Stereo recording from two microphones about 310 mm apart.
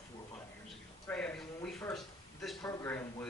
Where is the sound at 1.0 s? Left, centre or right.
Centre.